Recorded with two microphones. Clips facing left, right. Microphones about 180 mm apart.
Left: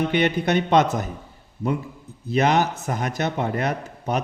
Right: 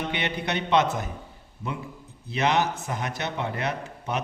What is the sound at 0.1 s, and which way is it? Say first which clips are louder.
Speech: left 8 dB; 45° left (ahead or behind).